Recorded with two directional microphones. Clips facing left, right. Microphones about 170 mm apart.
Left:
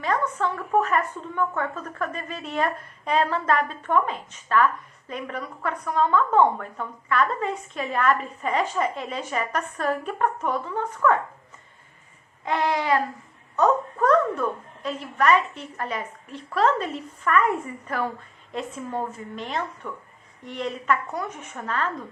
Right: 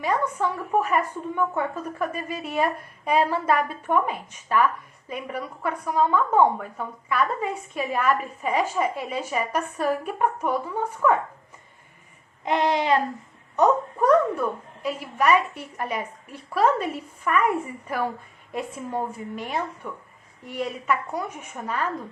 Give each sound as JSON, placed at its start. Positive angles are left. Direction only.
{"t": 0.0, "sound": "a woman's voice", "side_deg": -10}
{"t": 12.5, "sound": "a sound", "side_deg": -20}
{"t": 13.6, "sound": "a woman's voice", "side_deg": -15}